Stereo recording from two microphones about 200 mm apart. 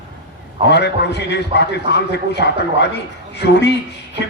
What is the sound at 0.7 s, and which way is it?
A man's voice, 60° left (ahead or behind).